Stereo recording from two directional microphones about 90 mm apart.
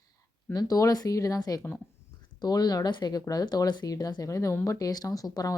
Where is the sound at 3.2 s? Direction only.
45° left (ahead or behind).